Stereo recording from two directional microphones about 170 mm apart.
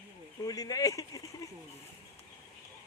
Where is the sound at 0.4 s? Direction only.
20° left (ahead or behind).